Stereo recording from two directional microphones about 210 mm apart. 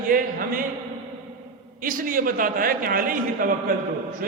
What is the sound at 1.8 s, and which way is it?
A man's voice, 40° right (ahead or behind).